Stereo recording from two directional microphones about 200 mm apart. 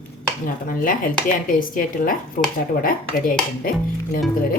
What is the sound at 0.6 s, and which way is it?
Speech, 45° left (ahead or behind).